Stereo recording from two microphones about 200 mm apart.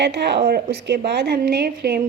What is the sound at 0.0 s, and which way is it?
A woman's voice, 55° right (ahead or behind).